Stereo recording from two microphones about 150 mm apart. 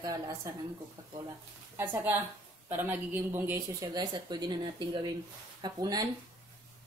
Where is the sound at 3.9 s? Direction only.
30° right (ahead or behind).